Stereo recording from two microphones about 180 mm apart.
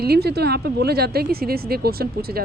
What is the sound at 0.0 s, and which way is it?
A man's voice, 60° right (ahead or behind).